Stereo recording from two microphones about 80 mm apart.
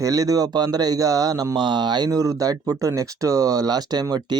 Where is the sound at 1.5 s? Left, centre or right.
Right.